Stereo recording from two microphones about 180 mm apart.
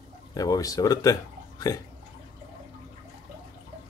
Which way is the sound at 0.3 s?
20° left (ahead or behind).